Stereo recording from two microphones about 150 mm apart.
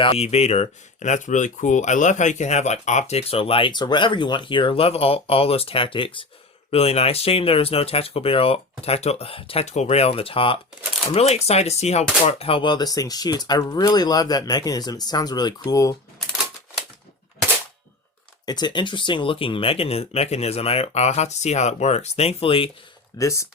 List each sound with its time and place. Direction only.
0.0 s speech: 40° left (ahead or behind); by 16.0 s 20° left (ahead or behind)
18.4 s speech: 30° left (ahead or behind)
23.1 s speech: 20° left (ahead or behind)